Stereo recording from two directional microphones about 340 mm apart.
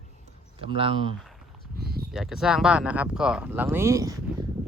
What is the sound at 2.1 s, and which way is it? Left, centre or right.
Speech, centre.